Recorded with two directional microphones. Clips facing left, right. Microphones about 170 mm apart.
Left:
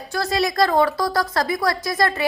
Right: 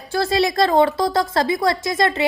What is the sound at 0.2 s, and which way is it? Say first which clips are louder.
A woman's voice: right 2 dB; 30° right (ahead or behind).